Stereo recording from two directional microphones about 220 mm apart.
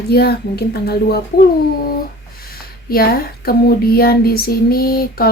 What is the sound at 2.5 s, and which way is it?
Speech, 45° left (ahead or behind).